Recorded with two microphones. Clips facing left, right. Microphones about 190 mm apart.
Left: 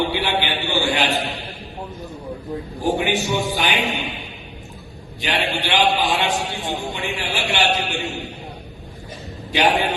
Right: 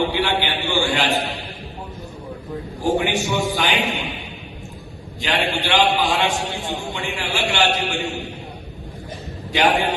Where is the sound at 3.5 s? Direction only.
20° left (ahead or behind).